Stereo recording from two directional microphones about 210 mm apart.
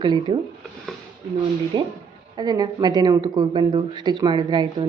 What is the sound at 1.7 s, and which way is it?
Speech, 20° right (ahead or behind).